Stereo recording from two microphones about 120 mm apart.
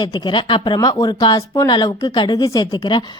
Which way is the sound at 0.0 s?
35° left (ahead or behind).